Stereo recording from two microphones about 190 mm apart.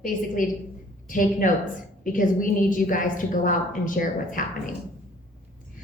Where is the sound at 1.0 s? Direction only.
45° left (ahead or behind).